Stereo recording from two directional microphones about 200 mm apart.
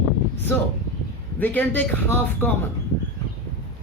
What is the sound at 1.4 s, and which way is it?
Speech, 10° left (ahead or behind).